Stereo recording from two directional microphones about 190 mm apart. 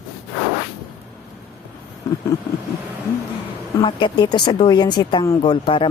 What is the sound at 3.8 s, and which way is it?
Speech, 25° left (ahead or behind).